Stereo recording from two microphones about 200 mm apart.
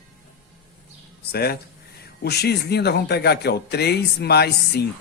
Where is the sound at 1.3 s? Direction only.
50° left (ahead or behind).